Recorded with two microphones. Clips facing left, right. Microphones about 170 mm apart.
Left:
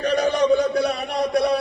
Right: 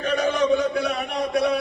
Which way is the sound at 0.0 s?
35° left (ahead or behind).